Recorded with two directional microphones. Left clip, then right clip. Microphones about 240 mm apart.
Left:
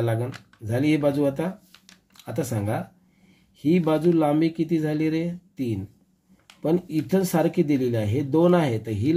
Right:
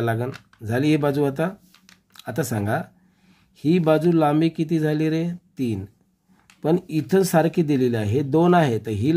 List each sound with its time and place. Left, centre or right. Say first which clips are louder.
0.0 s speech: right 2 dB; right